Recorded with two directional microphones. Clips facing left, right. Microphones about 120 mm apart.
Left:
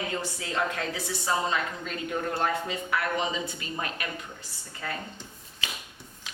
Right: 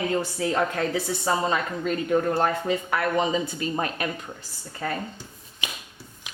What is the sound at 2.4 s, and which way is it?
Speech, 40° right (ahead or behind).